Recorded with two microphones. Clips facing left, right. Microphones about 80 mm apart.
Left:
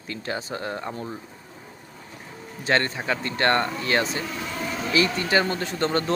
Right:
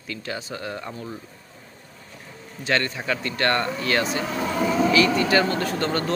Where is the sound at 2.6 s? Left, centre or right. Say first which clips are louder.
Left 1 dB; left.